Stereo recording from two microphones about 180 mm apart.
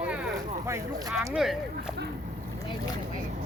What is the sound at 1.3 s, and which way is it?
Speech, centre (ahead or behind).